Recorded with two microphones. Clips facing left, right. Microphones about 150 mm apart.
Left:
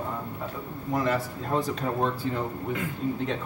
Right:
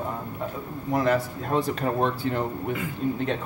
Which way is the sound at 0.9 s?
70° right (ahead or behind).